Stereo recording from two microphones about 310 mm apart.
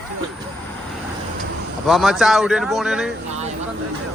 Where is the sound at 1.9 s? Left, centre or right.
Centre.